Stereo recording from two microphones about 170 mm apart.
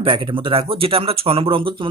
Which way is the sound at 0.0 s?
30° right (ahead or behind).